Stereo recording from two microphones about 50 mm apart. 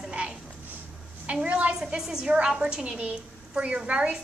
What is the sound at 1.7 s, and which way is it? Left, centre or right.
A woman's voice, centre.